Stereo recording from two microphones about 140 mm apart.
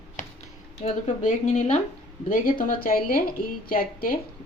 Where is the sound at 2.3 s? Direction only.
75° left (ahead or behind).